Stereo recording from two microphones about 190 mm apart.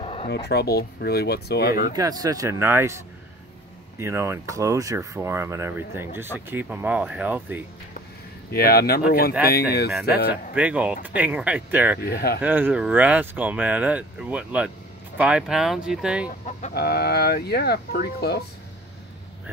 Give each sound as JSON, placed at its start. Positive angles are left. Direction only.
{"t": 0.0, "sound": "a sound", "side_deg": 30}
{"t": 0.3, "sound": "speech", "side_deg": 60}
{"t": 2.0, "sound": "speech", "side_deg": -20}
{"t": 4.0, "sound": "speech", "side_deg": -15}
{"t": 8.5, "sound": "speech", "side_deg": 55}
{"t": 10.5, "sound": "speech", "side_deg": -5}
{"t": 12.0, "sound": "speech", "side_deg": 55}
{"t": 12.4, "sound": "speech", "side_deg": -10}
{"t": 16.3, "sound": "speech", "side_deg": 40}
{"t": 16.7, "sound": "speech", "side_deg": 55}